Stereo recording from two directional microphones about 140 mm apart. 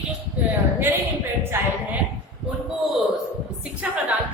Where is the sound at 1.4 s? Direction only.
15° right (ahead or behind).